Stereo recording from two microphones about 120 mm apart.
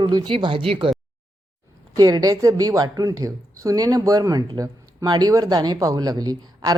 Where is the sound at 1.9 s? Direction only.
30° right (ahead or behind).